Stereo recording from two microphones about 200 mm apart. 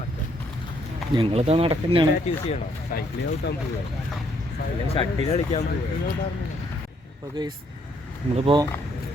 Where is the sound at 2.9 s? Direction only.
45° left (ahead or behind).